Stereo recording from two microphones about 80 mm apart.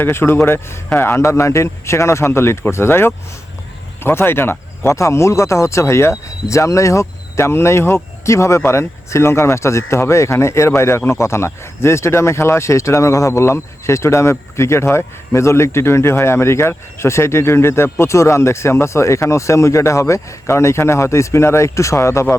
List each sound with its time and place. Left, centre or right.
0.0 s speech: left